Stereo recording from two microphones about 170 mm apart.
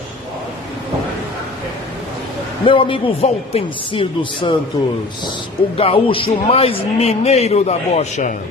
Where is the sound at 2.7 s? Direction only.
30° left (ahead or behind).